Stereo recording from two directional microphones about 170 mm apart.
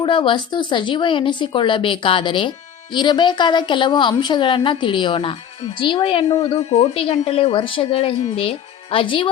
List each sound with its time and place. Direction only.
0.0 s a woman's voice: 30° left (ahead or behind)